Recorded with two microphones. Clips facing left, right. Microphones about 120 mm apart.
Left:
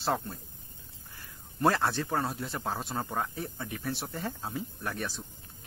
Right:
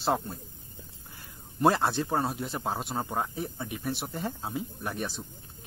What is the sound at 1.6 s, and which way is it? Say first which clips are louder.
Speech: right 3 dB; 20° right (ahead or behind).